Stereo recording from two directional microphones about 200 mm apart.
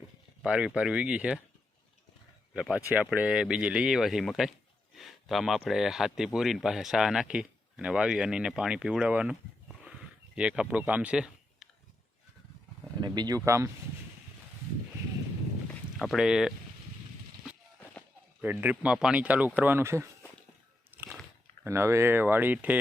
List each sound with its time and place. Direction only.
0.4 s speech: 5° right (ahead or behind)
2.5 s speech: 5° right (ahead or behind)
13.0 s speech: 20° right (ahead or behind)
16.0 s speech: centre (ahead or behind)
18.4 s speech: 10° right (ahead or behind)
20.9 s biting: 10° right (ahead or behind)
21.6 s speech: 15° right (ahead or behind)